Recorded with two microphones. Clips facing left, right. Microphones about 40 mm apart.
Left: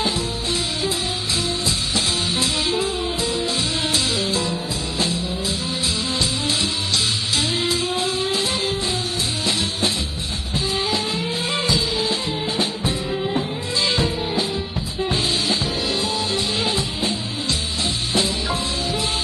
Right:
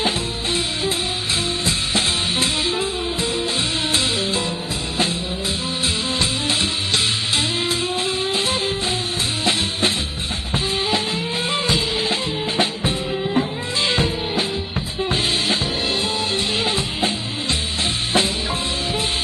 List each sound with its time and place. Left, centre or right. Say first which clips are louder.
2.0 s music: right 2 dB; right
7.3 s music: even; right
11.6 s music: right 1 dB; right
18.1 s music: right 1 dB; right